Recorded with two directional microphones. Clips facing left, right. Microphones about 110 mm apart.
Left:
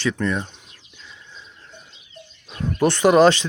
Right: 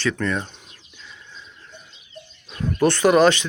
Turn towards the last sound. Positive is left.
turn(degrees=30)  # may be behind; listen again after turning